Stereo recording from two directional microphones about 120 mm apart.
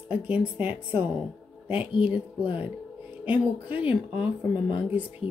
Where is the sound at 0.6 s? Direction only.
15° right (ahead or behind).